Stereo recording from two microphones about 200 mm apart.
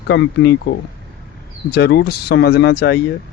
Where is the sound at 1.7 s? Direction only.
55° left (ahead or behind).